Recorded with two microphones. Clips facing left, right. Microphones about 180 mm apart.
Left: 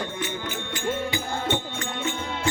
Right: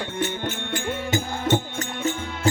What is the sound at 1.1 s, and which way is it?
Music, 45° right (ahead or behind).